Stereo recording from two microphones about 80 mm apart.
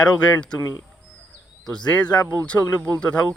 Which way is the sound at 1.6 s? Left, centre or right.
Centre.